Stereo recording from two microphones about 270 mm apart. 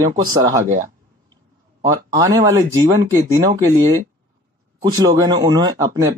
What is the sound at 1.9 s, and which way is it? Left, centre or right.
A man's voice, centre.